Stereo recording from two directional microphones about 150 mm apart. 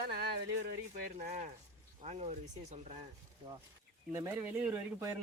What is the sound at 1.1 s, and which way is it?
Speech, 50° right (ahead or behind).